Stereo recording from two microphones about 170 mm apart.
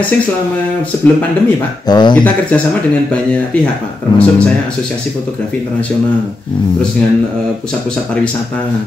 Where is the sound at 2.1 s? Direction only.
5° left (ahead or behind).